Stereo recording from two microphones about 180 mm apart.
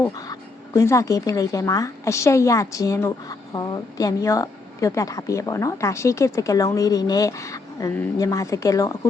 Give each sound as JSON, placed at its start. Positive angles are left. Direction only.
{"t": 0.0, "sound": "a woman's voice", "side_deg": 20}